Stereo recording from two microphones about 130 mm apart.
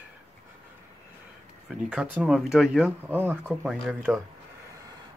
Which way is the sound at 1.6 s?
5° right (ahead or behind).